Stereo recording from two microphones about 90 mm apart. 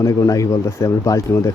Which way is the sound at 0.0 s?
40° left (ahead or behind).